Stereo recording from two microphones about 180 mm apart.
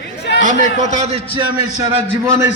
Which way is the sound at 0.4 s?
40° right (ahead or behind).